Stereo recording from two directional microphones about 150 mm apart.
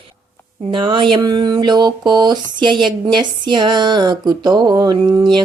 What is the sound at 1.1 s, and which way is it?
Speech, 30° right (ahead or behind).